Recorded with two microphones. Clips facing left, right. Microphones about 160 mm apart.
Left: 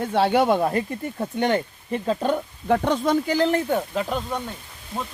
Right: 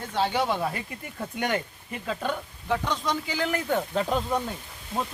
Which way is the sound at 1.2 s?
30° left (ahead or behind).